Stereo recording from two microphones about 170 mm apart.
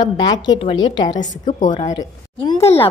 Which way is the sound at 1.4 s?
45° left (ahead or behind).